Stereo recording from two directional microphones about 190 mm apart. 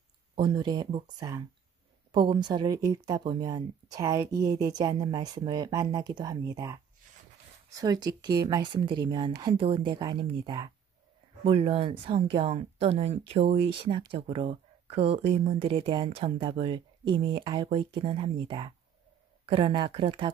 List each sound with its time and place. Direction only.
0.4 s speech: 20° right (ahead or behind)